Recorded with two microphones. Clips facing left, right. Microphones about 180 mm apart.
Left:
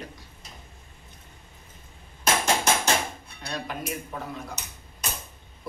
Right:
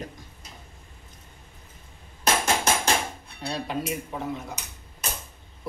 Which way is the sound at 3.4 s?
25° right (ahead or behind).